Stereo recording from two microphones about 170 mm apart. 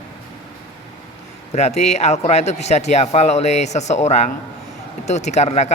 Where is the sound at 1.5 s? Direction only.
40° left (ahead or behind).